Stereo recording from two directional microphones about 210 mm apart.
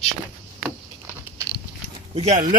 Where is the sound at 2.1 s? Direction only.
30° right (ahead or behind).